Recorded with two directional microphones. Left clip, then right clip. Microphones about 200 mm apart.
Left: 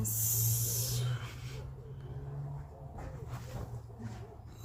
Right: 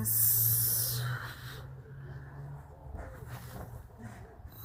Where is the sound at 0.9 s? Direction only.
20° right (ahead or behind).